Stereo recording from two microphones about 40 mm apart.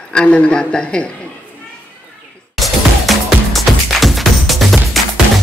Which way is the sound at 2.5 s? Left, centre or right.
Centre.